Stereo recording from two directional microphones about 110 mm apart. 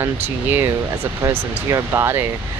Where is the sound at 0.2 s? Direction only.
20° right (ahead or behind).